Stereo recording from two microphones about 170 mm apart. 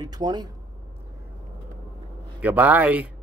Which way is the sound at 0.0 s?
25° right (ahead or behind).